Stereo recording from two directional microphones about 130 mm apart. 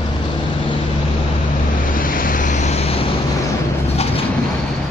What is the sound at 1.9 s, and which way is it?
Waves, 90° left.